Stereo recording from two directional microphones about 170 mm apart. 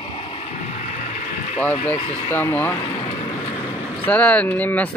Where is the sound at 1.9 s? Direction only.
10° left (ahead or behind).